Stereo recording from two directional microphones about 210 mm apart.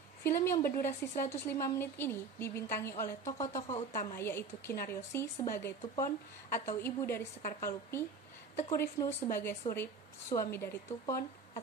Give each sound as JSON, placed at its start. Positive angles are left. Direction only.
{"t": 0.2, "sound": "a woman's voice", "side_deg": 10}
{"t": 3.5, "sound": "speech", "side_deg": 30}
{"t": 4.2, "sound": "a woman's voice", "side_deg": 10}